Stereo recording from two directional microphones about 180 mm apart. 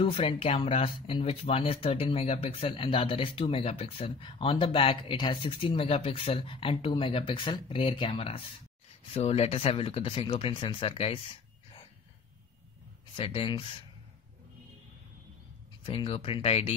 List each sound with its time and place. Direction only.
0.0 s speech: 30° left (ahead or behind)
13.1 s speech: 30° left (ahead or behind)
15.8 s speech: 30° left (ahead or behind)